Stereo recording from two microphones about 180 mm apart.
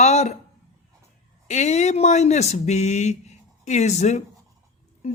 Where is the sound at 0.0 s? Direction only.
40° left (ahead or behind).